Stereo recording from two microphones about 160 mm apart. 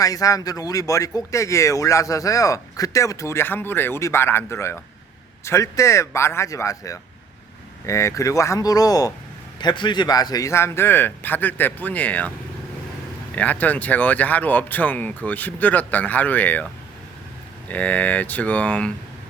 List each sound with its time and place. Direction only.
0.0 s speech: 20° left (ahead or behind)
13.3 s speech: 10° left (ahead or behind)
17.7 s speech: 10° left (ahead or behind)